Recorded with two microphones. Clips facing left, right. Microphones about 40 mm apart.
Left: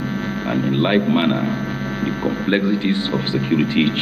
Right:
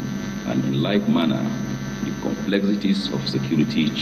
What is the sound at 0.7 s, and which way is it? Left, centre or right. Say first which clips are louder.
A man's voice: left 4 dB; left.